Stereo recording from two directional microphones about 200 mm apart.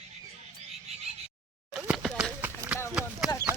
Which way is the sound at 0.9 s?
30° right (ahead or behind).